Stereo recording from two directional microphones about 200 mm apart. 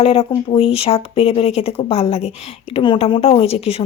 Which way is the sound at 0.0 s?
30° left (ahead or behind).